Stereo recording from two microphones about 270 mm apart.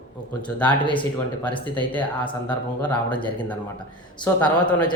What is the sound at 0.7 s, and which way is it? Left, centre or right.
Speech, centre.